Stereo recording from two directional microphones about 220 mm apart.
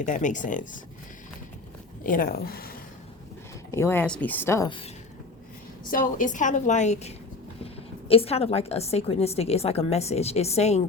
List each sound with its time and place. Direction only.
0.0 s a woman's voice: 35° left (ahead or behind)
2.0 s speech: 40° left (ahead or behind)
3.7 s speech: 10° left (ahead or behind)
5.9 s a woman's voice: 35° left (ahead or behind)